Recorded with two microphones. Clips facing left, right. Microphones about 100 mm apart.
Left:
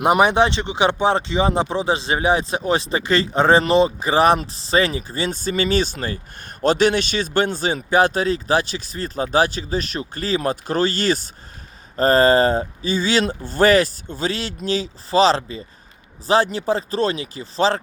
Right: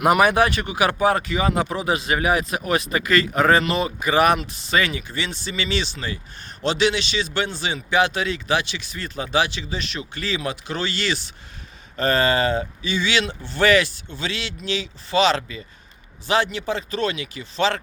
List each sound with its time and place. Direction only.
0.0 s a man's voice: 25° left (ahead or behind)